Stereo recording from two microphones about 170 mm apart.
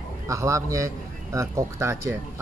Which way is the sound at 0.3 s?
15° right (ahead or behind).